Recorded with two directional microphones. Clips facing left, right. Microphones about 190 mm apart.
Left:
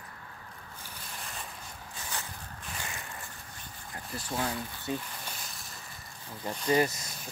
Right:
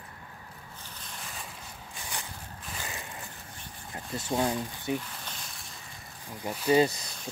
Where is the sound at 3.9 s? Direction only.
25° right (ahead or behind).